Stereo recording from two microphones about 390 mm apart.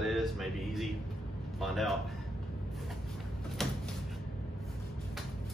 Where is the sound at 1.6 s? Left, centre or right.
Centre.